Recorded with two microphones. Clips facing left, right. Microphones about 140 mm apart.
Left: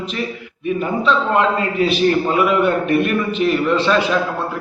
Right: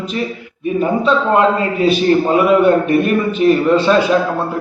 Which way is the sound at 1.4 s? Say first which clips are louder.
Right 3 dB; 35° right (ahead or behind).